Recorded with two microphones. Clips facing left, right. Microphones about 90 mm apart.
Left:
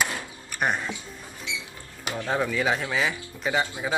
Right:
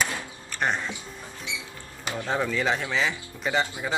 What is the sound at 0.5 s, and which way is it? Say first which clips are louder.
Speech: left 1 dB; 10° left (ahead or behind).